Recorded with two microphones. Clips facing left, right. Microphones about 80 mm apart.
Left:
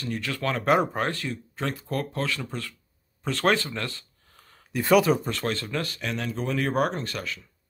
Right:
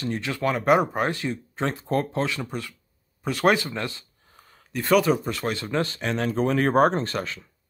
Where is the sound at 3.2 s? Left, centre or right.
Centre.